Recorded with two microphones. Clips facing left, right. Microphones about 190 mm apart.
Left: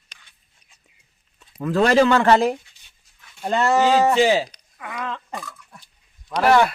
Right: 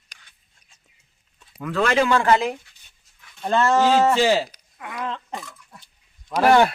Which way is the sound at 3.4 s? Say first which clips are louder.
Even; 15° left (ahead or behind).